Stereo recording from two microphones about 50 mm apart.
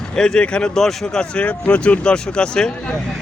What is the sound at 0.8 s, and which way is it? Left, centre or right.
Speech, centre.